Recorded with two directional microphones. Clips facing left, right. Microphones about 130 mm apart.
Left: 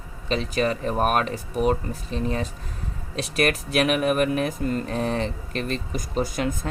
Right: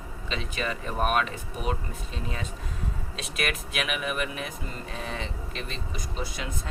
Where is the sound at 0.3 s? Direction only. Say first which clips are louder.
Left 9 dB; 40° left (ahead or behind).